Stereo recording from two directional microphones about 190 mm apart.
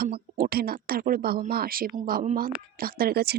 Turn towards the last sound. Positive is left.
turn(degrees=-55)  # may be behind; listen again after turning